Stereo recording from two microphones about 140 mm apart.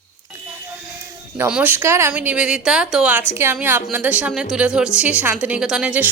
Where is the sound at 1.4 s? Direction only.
10° right (ahead or behind).